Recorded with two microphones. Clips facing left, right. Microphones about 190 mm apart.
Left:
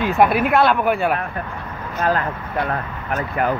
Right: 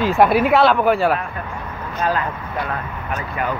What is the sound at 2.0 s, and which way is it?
Speech, 50° left (ahead or behind).